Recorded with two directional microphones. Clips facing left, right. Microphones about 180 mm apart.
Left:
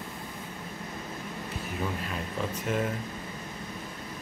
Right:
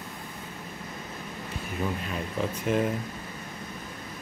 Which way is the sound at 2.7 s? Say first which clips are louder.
Right 4 dB; centre (ahead or behind).